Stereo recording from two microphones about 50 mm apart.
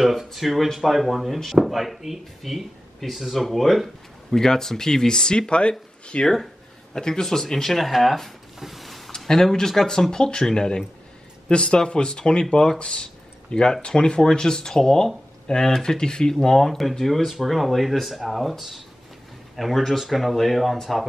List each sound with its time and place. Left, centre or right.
0.0 s speech: centre
4.3 s speech: centre
6.3 s speech: centre